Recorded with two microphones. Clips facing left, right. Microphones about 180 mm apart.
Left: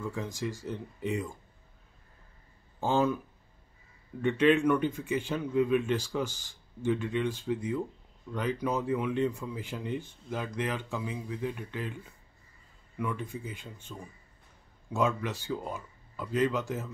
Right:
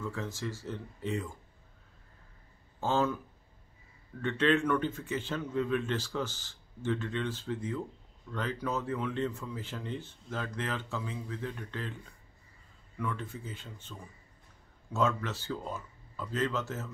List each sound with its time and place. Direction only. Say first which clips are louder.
0.0 s speech: left 2 dB; 15° left (ahead or behind)
2.8 s speech: left 2 dB; 15° left (ahead or behind)
4.2 s speech: left 4 dB; 15° left (ahead or behind)